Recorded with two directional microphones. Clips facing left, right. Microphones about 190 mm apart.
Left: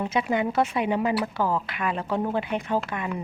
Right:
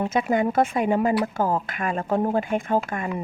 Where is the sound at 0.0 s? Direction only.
45° right (ahead or behind).